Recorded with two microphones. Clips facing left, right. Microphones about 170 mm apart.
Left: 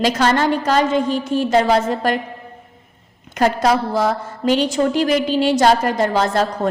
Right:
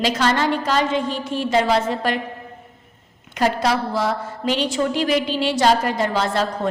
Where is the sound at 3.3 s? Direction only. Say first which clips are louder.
Left 3 dB; 45° left (ahead or behind).